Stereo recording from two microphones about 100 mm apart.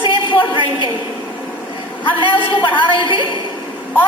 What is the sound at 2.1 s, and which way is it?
A woman's voice, 60° left (ahead or behind).